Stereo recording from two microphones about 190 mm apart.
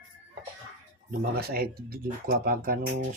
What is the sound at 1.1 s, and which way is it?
Speech, 55° right (ahead or behind).